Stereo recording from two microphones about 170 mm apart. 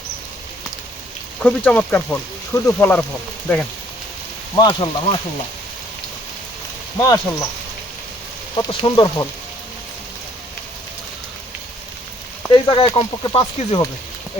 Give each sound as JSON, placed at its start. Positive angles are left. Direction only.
{"t": 1.4, "sound": "speech", "side_deg": 5}
{"t": 4.5, "sound": "speech", "side_deg": 25}
{"t": 7.0, "sound": "speech", "side_deg": 20}
{"t": 8.6, "sound": "speech", "side_deg": 25}
{"t": 12.6, "sound": "speech", "side_deg": 30}